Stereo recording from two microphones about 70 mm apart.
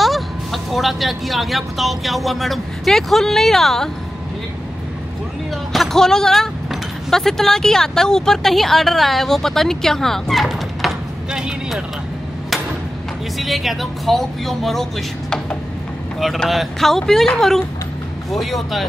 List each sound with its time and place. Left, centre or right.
0.0 s speech: centre
5.7 s speech: centre
11.3 s speech: centre
13.4 s speech: centre